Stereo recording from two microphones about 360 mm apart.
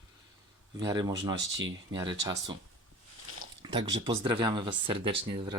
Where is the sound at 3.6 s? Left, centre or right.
Centre.